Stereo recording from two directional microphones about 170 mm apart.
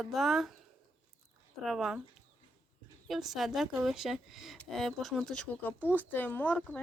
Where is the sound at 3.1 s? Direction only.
Centre (ahead or behind).